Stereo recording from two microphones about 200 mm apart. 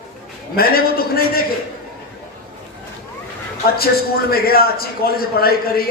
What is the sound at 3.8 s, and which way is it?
A man's voice, 50° left (ahead or behind).